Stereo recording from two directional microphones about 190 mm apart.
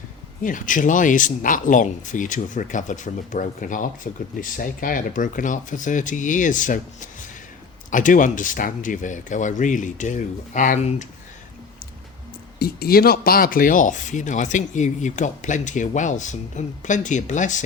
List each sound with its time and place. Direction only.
0.4 s speech: 45° left (ahead or behind)
12.5 s speech: 55° left (ahead or behind)